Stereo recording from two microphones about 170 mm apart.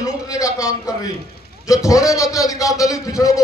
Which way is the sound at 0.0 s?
20° left (ahead or behind).